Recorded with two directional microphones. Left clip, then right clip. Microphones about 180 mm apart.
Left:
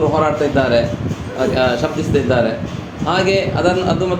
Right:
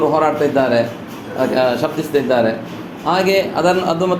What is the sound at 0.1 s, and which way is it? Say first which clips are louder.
A man's voice: right 1 dB; 15° right (ahead or behind).